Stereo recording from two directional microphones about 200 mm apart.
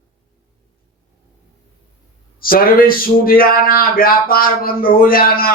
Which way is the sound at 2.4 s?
45° left (ahead or behind).